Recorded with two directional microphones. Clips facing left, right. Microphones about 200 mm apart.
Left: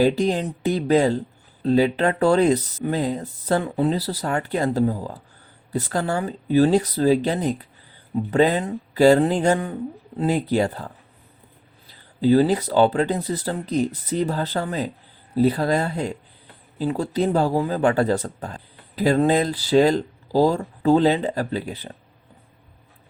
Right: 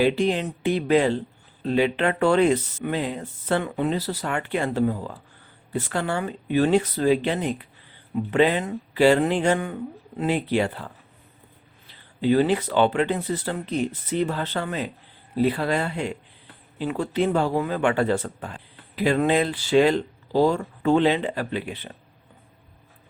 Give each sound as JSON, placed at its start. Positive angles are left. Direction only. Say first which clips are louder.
{"t": 0.0, "sound": "speech", "louder": "left 2 dB", "side_deg": 40}
{"t": 11.9, "sound": "speech", "louder": "left 4 dB", "side_deg": 35}